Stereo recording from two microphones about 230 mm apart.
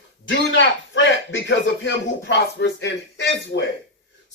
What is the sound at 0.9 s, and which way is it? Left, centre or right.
Speech, left.